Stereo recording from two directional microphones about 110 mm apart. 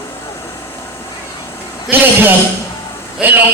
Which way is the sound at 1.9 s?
20° right (ahead or behind).